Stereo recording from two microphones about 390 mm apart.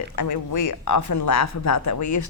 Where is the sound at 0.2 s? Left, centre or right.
Left.